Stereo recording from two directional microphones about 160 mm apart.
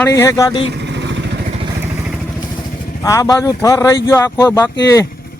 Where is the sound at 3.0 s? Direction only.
20° left (ahead or behind).